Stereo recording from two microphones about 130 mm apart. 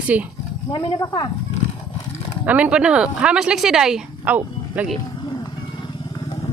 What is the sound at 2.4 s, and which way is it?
Speech, 10° right (ahead or behind).